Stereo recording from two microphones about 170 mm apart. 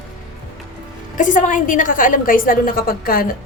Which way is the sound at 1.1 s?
50° left (ahead or behind).